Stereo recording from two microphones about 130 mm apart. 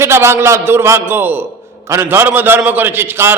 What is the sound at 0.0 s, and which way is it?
A man's voice, 20° right (ahead or behind).